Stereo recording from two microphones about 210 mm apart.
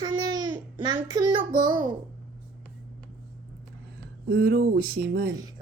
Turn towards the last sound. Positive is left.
turn(degrees=-50)  # may be behind; listen again after turning